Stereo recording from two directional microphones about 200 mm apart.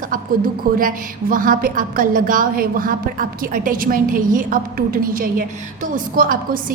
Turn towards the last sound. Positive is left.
turn(degrees=-45)  # may be behind; listen again after turning